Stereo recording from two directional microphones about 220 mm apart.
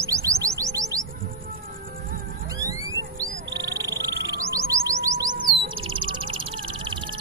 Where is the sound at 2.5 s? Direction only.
15° right (ahead or behind).